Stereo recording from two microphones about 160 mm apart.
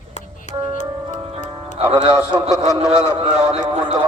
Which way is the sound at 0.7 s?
45° left (ahead or behind).